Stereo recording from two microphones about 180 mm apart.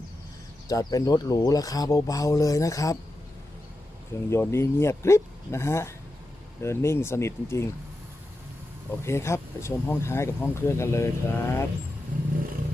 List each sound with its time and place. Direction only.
0.7 s speech: 20° left (ahead or behind)
4.3 s speech: 15° left (ahead or behind)
8.9 s speech: 15° left (ahead or behind)